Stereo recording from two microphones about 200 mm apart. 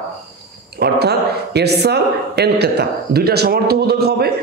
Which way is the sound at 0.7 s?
55° right (ahead or behind).